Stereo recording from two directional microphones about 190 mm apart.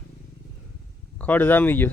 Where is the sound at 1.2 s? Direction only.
10° left (ahead or behind).